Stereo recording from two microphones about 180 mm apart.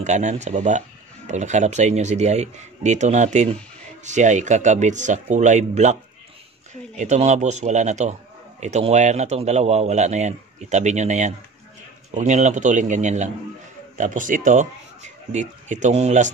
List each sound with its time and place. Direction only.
0.0 s a man's voice: 40° right (ahead or behind)
7.0 s a man's voice: 40° right (ahead or behind)